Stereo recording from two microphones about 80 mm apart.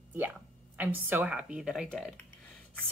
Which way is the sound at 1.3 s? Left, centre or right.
Centre.